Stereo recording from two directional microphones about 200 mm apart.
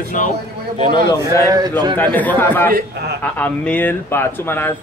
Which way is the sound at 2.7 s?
55° right (ahead or behind).